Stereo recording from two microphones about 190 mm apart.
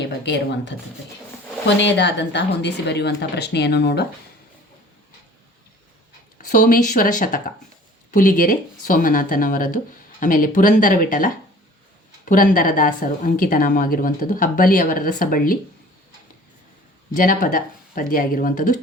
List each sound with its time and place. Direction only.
0.0 s speech: 65° left (ahead or behind)
1.8 s a woman's voice: 65° left (ahead or behind)
6.5 s a woman's voice: 40° left (ahead or behind)
17.2 s a woman's voice: 45° left (ahead or behind)